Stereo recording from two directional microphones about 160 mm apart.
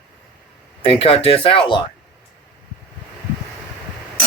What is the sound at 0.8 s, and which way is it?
Speech, 35° left (ahead or behind).